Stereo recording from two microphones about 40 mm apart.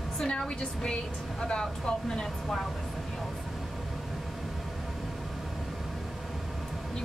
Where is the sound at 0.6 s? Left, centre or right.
Left.